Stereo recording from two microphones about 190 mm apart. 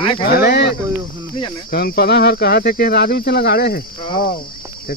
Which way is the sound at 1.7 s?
50° left (ahead or behind).